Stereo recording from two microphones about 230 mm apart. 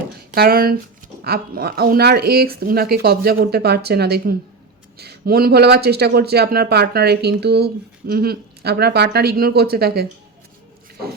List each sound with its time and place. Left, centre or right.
0.3 s a man's voice: right